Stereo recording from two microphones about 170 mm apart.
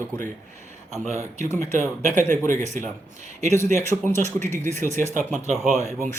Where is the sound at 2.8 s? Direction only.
45° right (ahead or behind).